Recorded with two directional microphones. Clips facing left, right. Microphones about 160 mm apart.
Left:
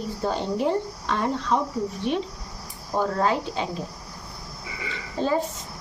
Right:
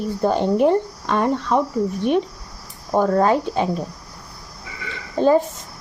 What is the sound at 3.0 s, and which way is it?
Speech, 50° right (ahead or behind).